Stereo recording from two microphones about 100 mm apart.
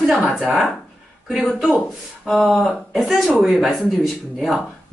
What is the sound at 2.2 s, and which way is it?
Speech, 5° right (ahead or behind).